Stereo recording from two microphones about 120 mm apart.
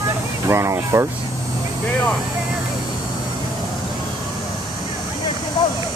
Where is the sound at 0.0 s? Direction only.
25° right (ahead or behind).